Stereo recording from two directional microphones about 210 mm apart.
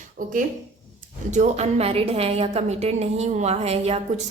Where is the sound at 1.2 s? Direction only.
35° right (ahead or behind).